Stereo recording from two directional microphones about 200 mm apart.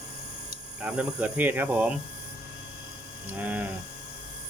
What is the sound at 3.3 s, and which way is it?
Speech, 10° right (ahead or behind).